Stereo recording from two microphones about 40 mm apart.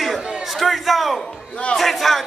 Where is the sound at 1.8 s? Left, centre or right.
Centre.